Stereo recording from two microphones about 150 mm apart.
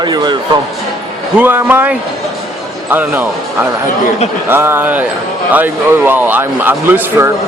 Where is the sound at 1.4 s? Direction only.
10° right (ahead or behind).